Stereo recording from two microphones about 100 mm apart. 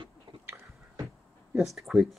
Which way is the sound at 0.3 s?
50° right (ahead or behind).